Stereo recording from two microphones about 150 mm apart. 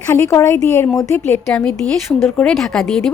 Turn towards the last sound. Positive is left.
turn(degrees=5)  # may be behind; listen again after turning